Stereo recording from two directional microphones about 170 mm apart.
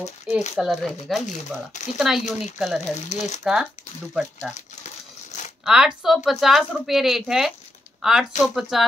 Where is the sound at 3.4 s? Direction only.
Centre (ahead or behind).